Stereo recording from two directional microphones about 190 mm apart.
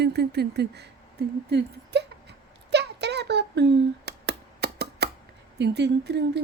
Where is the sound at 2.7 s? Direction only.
65° right (ahead or behind).